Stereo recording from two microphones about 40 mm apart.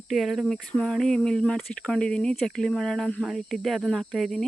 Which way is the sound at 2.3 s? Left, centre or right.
Centre.